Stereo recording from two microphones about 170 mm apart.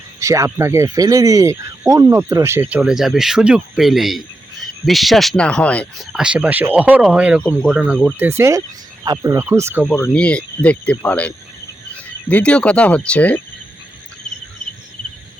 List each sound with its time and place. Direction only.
0.2 s speech: 20° right (ahead or behind); by 6.1 s 5° left (ahead or behind)
6.1 s speech: 5° right (ahead or behind)
9.9 s speech: 10° left (ahead or behind)